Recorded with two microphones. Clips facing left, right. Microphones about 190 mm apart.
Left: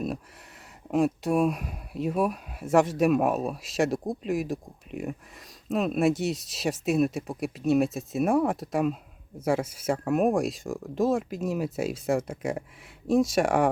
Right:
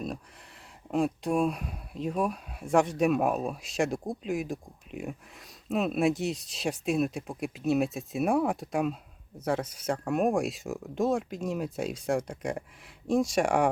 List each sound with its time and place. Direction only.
0.9 s speech: 5° left (ahead or behind)